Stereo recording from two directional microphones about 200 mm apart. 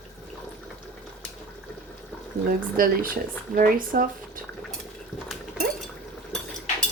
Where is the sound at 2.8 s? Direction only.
45° right (ahead or behind).